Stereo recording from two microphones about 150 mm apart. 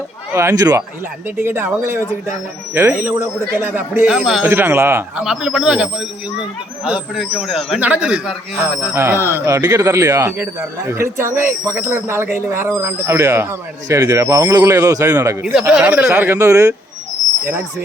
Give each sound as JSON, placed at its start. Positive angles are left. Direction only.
{"t": 0.3, "sound": "speech", "side_deg": -20}
{"t": 1.4, "sound": "speech", "side_deg": -15}
{"t": 4.4, "sound": "speech", "side_deg": -15}
{"t": 5.2, "sound": "speech", "side_deg": -5}
{"t": 9.0, "sound": "speech", "side_deg": -15}
{"t": 15.7, "sound": "speech", "side_deg": -10}